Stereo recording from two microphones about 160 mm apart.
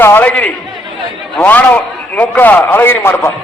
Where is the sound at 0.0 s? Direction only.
15° left (ahead or behind).